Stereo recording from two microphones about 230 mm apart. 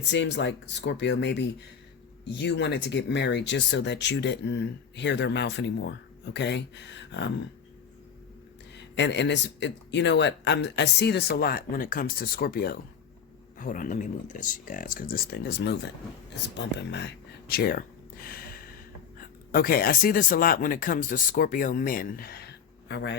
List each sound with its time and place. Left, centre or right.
0.1 s speech: left
8.7 s speech: left
16.6 s a sound: left
19.5 s speech: left